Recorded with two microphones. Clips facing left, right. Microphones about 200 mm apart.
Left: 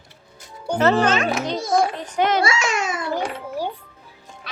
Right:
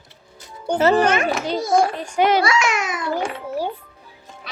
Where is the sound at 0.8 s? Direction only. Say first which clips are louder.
Right 1 dB; 10° right (ahead or behind).